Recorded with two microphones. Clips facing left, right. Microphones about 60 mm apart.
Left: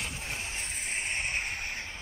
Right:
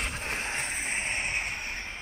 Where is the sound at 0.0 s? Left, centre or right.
Right.